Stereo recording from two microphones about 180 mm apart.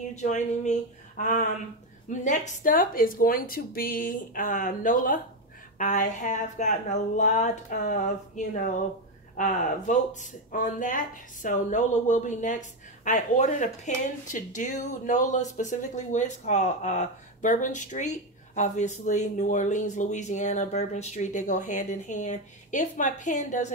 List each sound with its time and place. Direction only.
0.1 s a woman's voice: 40° left (ahead or behind)